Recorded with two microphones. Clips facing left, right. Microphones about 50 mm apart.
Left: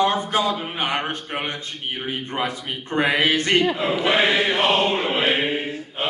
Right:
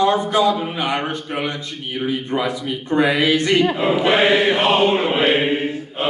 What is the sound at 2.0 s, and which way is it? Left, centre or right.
Speech, left.